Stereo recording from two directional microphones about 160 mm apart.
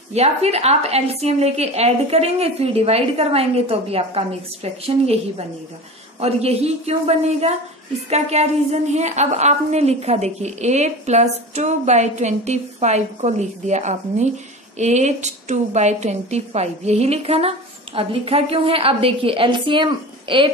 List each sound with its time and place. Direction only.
0.1 s a woman's voice: 40° right (ahead or behind)
6.1 s a woman's voice: 40° right (ahead or behind)